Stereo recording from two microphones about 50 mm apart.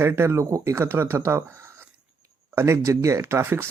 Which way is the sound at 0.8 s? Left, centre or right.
Right.